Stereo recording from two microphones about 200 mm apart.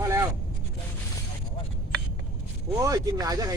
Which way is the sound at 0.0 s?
15° right (ahead or behind).